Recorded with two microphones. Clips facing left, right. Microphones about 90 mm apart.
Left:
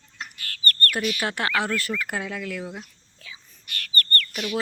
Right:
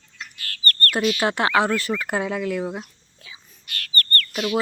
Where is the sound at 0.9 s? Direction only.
20° right (ahead or behind).